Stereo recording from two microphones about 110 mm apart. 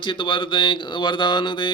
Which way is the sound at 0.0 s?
50° left (ahead or behind).